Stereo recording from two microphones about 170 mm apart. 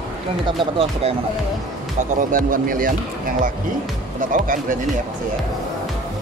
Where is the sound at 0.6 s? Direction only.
35° right (ahead or behind).